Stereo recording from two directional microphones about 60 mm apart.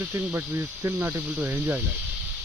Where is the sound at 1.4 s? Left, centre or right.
Right.